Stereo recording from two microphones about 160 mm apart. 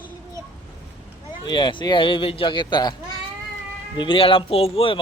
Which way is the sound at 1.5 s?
30° left (ahead or behind).